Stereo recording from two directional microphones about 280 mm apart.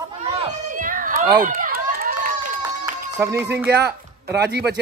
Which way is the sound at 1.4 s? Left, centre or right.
Right.